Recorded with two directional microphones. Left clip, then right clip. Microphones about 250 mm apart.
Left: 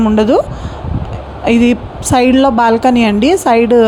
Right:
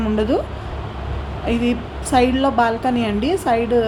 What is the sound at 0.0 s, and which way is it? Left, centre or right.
Speech, left.